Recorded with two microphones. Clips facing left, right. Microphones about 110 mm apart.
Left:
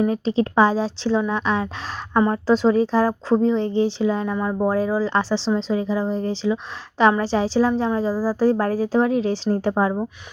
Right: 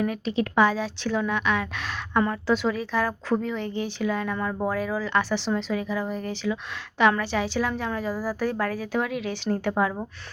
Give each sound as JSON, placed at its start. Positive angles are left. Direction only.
{"t": 0.0, "sound": "speech", "side_deg": 30}